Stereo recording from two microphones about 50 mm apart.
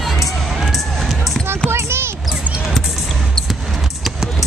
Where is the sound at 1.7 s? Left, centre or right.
Right.